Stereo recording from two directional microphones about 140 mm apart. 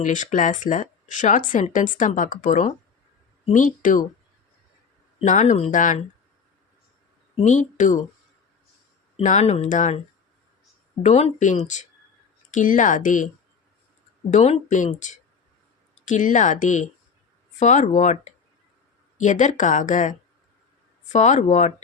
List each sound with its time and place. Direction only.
0.0 s speech: 60° left (ahead or behind)
5.2 s speech: 60° left (ahead or behind)
7.3 s speech: 60° left (ahead or behind)
9.2 s speech: 55° left (ahead or behind)
11.0 s speech: 50° left (ahead or behind)
14.3 s speech: 55° left (ahead or behind)